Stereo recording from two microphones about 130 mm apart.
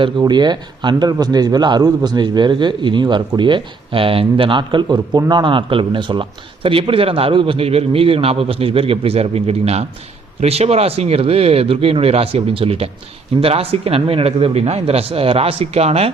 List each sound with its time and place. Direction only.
0.2 s a man's voice: 35° right (ahead or behind); by 16.1 s 50° right (ahead or behind)